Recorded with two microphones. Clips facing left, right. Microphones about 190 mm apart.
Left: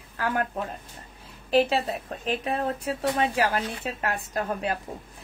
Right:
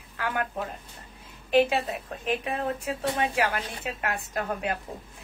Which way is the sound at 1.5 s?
35° left (ahead or behind).